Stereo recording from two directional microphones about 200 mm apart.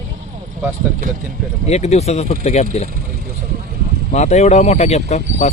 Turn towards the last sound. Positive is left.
turn(degrees=35)  # may be behind; listen again after turning